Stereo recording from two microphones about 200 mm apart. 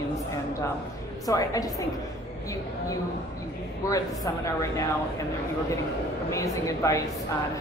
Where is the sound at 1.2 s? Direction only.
15° left (ahead or behind).